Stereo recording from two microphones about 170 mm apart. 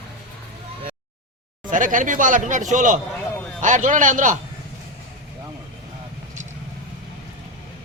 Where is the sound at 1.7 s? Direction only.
50° right (ahead or behind).